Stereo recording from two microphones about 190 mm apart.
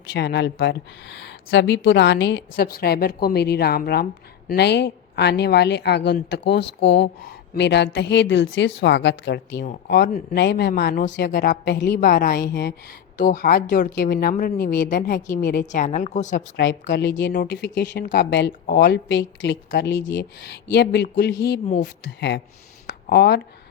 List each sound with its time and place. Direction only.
0.1 s speech: 65° left (ahead or behind)
11.3 s a woman's voice: 50° left (ahead or behind)
15.7 s a woman's voice: 40° left (ahead or behind)
16.6 s speech: 75° left (ahead or behind)
22.9 s a sound: 60° left (ahead or behind)